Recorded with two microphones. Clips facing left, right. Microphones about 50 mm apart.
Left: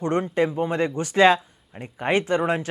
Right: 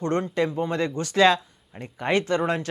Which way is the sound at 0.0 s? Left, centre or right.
Centre.